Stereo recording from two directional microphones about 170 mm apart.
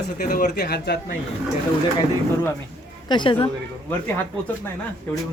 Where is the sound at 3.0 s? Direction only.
30° left (ahead or behind).